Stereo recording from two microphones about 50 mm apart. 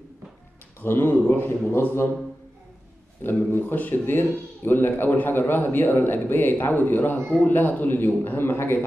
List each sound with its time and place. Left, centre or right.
0.7 s speech: left
3.3 s a man's voice: left